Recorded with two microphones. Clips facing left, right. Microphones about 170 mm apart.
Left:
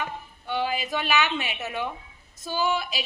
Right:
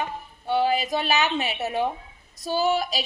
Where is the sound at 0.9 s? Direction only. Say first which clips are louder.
Right 2 dB; 40° right (ahead or behind).